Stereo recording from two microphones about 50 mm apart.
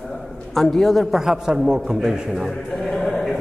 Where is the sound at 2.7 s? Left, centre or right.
Centre.